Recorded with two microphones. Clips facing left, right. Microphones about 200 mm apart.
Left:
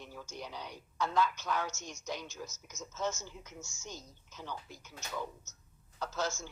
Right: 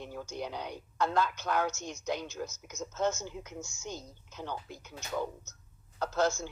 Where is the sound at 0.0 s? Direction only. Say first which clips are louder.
Right 7 dB; 55° right (ahead or behind).